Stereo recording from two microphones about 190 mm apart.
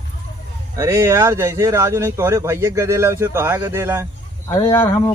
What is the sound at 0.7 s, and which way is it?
Speech, 15° right (ahead or behind).